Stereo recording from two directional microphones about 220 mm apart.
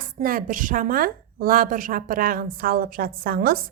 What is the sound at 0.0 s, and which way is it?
A woman's voice, 40° right (ahead or behind).